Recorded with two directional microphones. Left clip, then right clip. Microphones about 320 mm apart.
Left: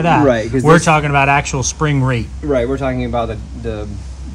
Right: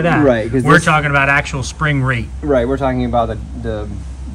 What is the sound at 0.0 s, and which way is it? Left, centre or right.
Speech, centre.